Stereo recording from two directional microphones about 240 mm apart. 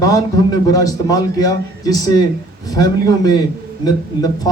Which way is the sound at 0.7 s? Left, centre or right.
Centre.